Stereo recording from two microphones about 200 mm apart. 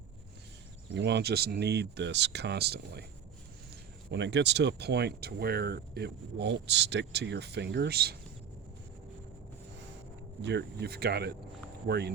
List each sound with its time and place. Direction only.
0.9 s speech: 60° right (ahead or behind)
4.1 s speech: 60° right (ahead or behind)
10.4 s speech: 55° right (ahead or behind)